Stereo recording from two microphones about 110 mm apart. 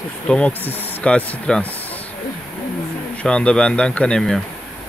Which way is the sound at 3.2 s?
10° left (ahead or behind).